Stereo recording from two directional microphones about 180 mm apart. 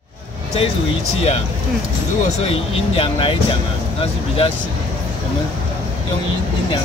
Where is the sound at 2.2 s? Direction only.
35° left (ahead or behind).